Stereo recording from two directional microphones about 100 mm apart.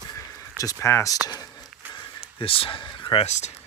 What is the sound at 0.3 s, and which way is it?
Speech, 35° left (ahead or behind).